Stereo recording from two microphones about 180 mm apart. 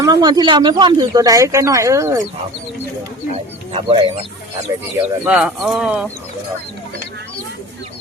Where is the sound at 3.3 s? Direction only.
35° right (ahead or behind).